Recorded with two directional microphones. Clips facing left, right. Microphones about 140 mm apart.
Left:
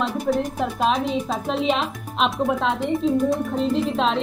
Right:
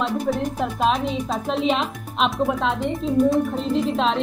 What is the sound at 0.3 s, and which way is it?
Speech, centre (ahead or behind).